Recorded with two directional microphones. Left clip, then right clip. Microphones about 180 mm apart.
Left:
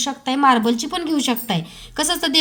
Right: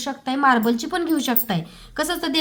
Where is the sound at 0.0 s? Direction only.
5° left (ahead or behind).